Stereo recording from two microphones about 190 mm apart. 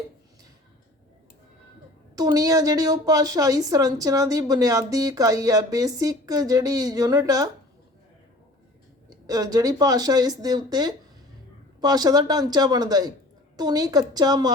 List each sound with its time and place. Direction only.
2.1 s a woman's voice: 20° right (ahead or behind)
9.0 s a woman's voice: 20° right (ahead or behind)